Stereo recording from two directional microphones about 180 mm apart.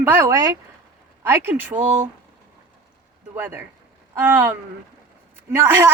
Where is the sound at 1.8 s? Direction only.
40° right (ahead or behind).